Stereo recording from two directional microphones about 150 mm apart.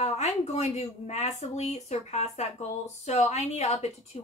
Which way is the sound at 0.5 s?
45° left (ahead or behind).